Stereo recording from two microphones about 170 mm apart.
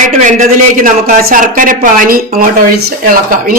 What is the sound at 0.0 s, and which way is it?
A woman's voice, 45° right (ahead or behind).